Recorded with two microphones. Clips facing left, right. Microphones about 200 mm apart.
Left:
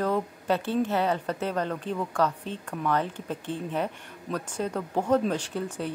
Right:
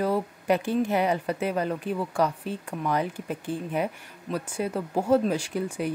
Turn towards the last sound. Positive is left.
turn(degrees=-10)  # may be behind; listen again after turning